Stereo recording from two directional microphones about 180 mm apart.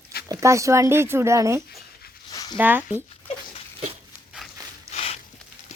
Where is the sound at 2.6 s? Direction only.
10° right (ahead or behind).